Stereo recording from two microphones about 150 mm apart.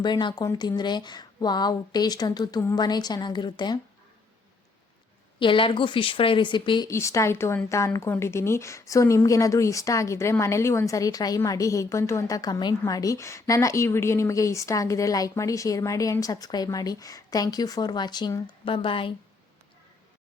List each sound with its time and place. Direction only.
0.0 s a woman's voice: 30° left (ahead or behind)
5.4 s a woman's voice: 35° left (ahead or behind)
6.9 s a woman's voice: 20° left (ahead or behind); by 19.1 s 35° left (ahead or behind)